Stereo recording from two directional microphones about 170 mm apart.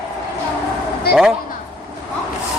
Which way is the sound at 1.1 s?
70° left (ahead or behind).